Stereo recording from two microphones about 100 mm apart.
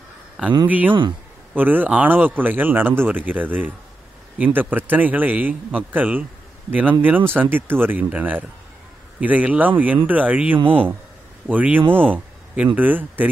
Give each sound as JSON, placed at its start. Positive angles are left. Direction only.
{"t": 0.7, "sound": "a man's voice", "side_deg": -15}
{"t": 10.6, "sound": "speech", "side_deg": -65}
{"t": 11.4, "sound": "a man's voice", "side_deg": -15}